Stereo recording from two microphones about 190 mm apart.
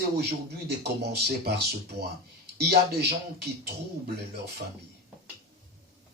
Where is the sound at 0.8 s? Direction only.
60° right (ahead or behind).